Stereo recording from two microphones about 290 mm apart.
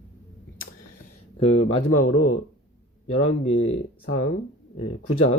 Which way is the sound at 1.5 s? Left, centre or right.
Left.